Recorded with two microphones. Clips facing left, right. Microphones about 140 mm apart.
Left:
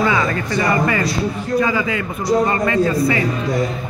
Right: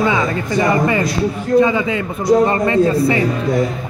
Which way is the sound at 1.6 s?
25° right (ahead or behind).